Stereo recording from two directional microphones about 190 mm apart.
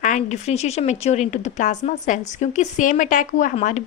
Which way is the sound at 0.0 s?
40° left (ahead or behind).